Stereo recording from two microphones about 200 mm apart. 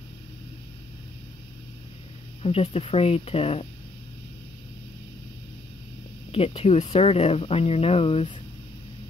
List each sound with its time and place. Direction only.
2.4 s speech: 30° left (ahead or behind)
6.3 s speech: 30° left (ahead or behind)